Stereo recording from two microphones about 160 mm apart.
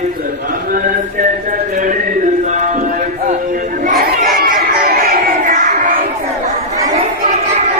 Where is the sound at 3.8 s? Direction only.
65° right (ahead or behind).